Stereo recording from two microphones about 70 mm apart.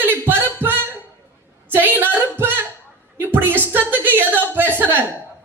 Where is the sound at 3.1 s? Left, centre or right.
Right.